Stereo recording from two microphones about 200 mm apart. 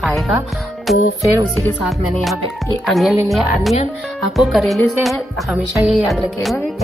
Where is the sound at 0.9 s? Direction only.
Centre (ahead or behind).